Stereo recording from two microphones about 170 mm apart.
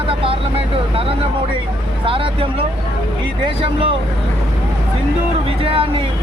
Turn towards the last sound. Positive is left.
turn(degrees=-30)  # may be behind; listen again after turning